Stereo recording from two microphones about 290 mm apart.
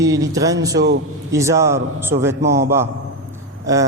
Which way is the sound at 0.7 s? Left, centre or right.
Right.